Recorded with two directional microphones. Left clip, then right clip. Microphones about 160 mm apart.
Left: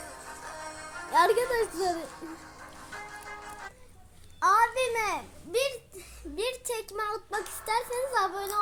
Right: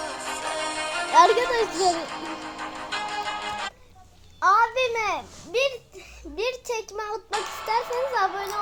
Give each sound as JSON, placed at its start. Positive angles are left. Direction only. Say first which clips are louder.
{"t": 0.0, "sound": "music", "louder": "right 12 dB", "side_deg": -50}
{"t": 1.1, "sound": "a child's voice", "louder": "right 6 dB", "side_deg": -5}
{"t": 1.7, "sound": "music", "louder": "right 7 dB", "side_deg": -50}
{"t": 4.4, "sound": "a child's voice", "louder": "right 4 dB", "side_deg": -5}
{"t": 7.3, "sound": "speech", "louder": "right 5 dB", "side_deg": -50}
{"t": 7.7, "sound": "a child's voice", "louder": "right 4 dB", "side_deg": -5}